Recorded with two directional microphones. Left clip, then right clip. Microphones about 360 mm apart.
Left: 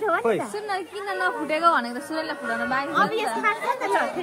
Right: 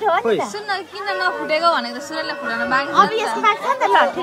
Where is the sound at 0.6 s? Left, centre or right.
Centre.